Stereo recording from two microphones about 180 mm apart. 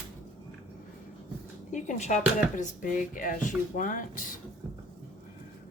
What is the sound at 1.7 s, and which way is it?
Speech, 40° left (ahead or behind).